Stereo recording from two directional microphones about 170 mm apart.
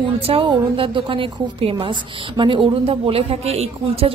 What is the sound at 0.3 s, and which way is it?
A woman's voice, 30° right (ahead or behind).